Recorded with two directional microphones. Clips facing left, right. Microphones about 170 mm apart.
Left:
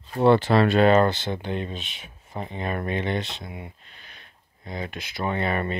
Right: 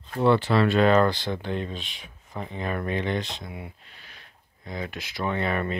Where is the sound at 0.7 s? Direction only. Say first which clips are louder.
Left 1 dB; 65° left (ahead or behind).